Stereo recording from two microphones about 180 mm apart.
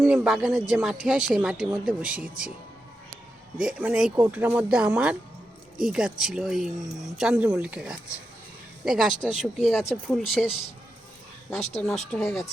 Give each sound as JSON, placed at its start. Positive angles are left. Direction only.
{"t": 0.0, "sound": "speech", "side_deg": -5}
{"t": 3.6, "sound": "speech", "side_deg": -5}
{"t": 11.8, "sound": "speech", "side_deg": 5}